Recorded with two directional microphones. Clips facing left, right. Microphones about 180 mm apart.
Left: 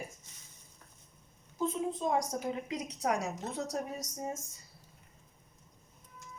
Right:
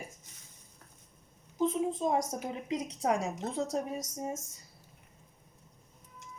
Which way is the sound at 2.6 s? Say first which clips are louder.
Right 3 dB; 25° right (ahead or behind).